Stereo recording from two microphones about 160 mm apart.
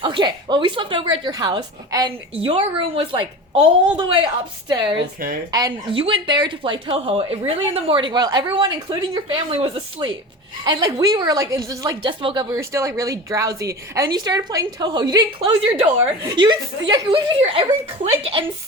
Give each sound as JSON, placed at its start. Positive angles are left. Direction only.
{"t": 0.0, "sound": "a woman's voice", "side_deg": -30}
{"t": 4.9, "sound": "a woman's voice", "side_deg": -70}
{"t": 5.5, "sound": "a woman's voice", "side_deg": -25}
{"t": 6.0, "sound": "a woman's voice", "side_deg": -35}